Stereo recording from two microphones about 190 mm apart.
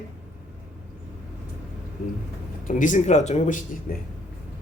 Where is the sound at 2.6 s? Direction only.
40° left (ahead or behind).